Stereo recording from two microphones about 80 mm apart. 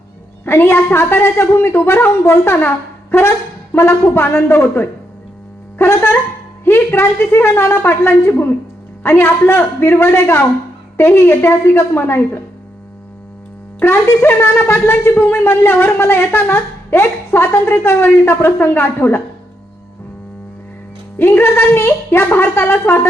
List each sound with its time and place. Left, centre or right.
0.4 s speech: left
5.8 s a sound: left
6.7 s a woman's voice: left
13.7 s speech: left
21.2 s speech: left